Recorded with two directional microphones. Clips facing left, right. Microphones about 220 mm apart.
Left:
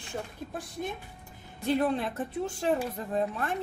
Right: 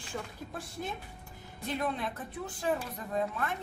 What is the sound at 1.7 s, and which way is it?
Music, 30° left (ahead or behind).